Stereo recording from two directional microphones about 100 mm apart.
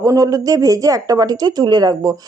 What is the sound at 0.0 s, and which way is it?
Speech, 35° right (ahead or behind).